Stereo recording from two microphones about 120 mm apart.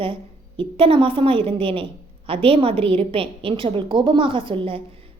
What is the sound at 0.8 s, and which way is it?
A woman's voice, 50° right (ahead or behind).